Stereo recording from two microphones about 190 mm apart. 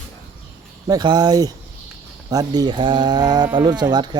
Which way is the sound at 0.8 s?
20° right (ahead or behind).